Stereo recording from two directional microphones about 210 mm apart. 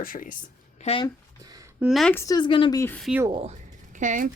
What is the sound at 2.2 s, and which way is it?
Speech, 20° left (ahead or behind).